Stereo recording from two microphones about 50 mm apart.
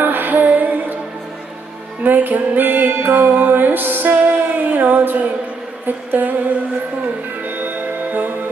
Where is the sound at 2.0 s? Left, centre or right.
Right.